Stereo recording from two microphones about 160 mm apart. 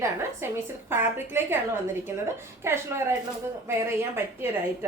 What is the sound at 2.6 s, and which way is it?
Speech, 15° right (ahead or behind).